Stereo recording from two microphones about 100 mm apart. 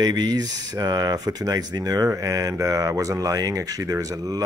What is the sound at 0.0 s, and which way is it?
Speech, 45° right (ahead or behind).